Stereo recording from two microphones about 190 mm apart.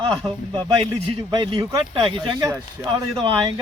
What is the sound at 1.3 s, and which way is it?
Speech, 25° right (ahead or behind).